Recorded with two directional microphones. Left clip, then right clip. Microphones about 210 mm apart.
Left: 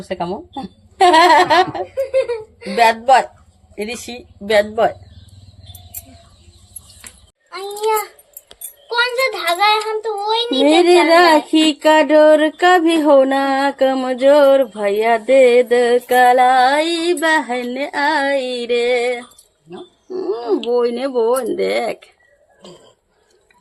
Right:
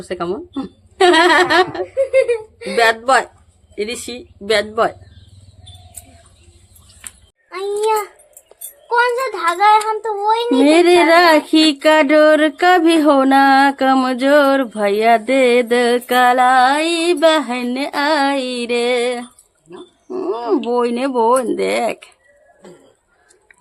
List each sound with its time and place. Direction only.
0.0 s speech: 15° right (ahead or behind)
8.9 s speech: 5° right (ahead or behind)